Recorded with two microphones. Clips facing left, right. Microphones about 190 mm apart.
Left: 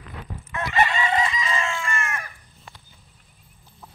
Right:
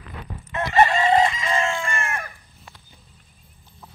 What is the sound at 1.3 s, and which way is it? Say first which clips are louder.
Chicken: right 3 dB; 50° right (ahead or behind).